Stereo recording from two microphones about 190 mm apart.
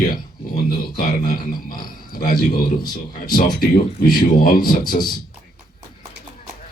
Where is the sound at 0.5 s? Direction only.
50° left (ahead or behind).